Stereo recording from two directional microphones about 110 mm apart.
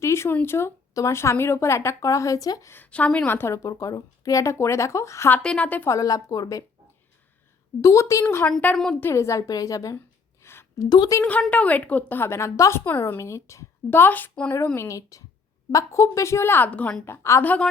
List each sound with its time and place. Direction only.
0.0 s a woman's voice: 25° left (ahead or behind)
2.7 s a woman's voice: 15° left (ahead or behind)
5.4 s a woman's voice: 10° left (ahead or behind)
5.9 s a woman's voice: 30° left (ahead or behind)
7.8 s a woman's voice: 30° left (ahead or behind)
8.4 s a woman's voice: 5° left (ahead or behind)
9.0 s a woman's voice: 25° left (ahead or behind)
10.4 s a sound: 20° left (ahead or behind)
10.8 s a woman's voice: 40° left (ahead or behind)
11.2 s a woman's voice: 15° left (ahead or behind)
14.8 s a woman's voice: 30° left (ahead or behind); by 17.2 s 15° left (ahead or behind)
17.2 s a woman's voice: 25° left (ahead or behind)